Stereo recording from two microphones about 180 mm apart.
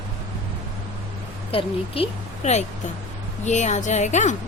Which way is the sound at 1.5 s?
35° left (ahead or behind).